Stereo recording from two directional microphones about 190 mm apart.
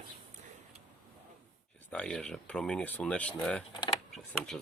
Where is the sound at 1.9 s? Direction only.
5° left (ahead or behind).